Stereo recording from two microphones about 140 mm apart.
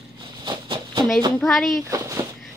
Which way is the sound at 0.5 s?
30° right (ahead or behind).